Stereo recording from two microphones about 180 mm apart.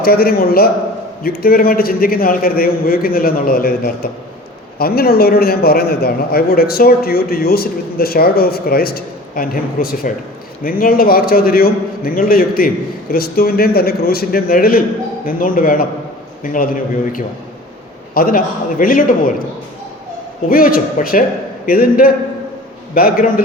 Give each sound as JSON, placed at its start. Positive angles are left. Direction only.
{"t": 0.0, "sound": "a man's voice", "side_deg": 55}
{"t": 20.5, "sound": "a man's voice", "side_deg": 50}